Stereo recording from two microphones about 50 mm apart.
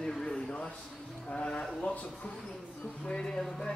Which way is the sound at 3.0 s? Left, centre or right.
Centre.